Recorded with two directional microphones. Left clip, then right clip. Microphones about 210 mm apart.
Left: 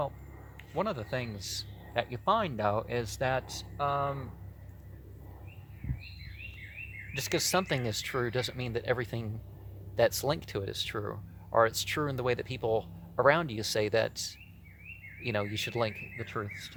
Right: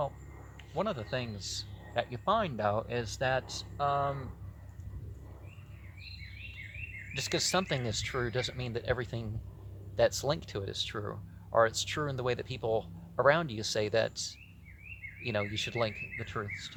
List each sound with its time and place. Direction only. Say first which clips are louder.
0.5 s speech: left 1 dB; 30° left (ahead or behind)
7.1 s speech: left 1 dB; 25° left (ahead or behind)